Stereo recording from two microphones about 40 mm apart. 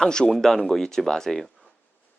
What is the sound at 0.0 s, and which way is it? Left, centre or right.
Speech, centre.